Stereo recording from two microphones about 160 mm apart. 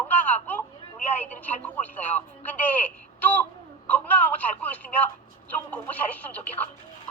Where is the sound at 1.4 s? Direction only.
10° left (ahead or behind).